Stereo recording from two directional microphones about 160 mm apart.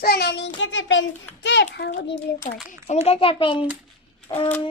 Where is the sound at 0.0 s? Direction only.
85° left.